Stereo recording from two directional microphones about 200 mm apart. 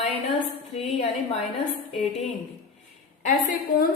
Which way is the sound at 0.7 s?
30° left (ahead or behind).